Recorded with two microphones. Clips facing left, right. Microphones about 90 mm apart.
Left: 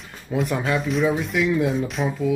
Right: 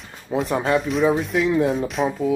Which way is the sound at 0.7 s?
Centre (ahead or behind).